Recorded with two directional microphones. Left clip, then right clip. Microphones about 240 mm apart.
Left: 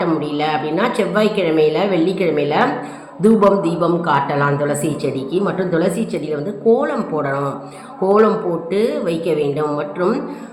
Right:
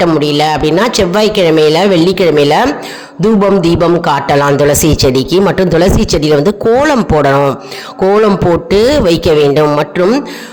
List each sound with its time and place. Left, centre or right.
0.0 s a man's voice: right
8.7 s a man's voice: right